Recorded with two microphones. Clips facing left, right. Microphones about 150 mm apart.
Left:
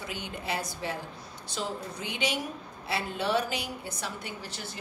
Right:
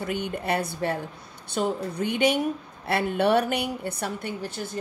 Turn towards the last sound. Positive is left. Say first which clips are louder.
# right 8 dB
turn(degrees=-50)  # may be behind; listen again after turning